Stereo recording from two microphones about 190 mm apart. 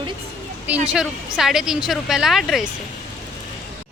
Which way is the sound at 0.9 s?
Centre (ahead or behind).